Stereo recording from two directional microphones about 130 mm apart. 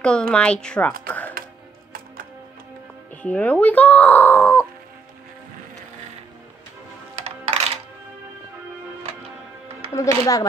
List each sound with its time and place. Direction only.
0.3 s speech: 5° left (ahead or behind)
1.0 s music: 10° left (ahead or behind)
3.2 s speech: 10° left (ahead or behind)
7.2 s coin: 50° right (ahead or behind)
9.9 s speech: 25° left (ahead or behind)